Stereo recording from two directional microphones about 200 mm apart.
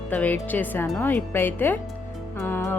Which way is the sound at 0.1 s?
10° left (ahead or behind).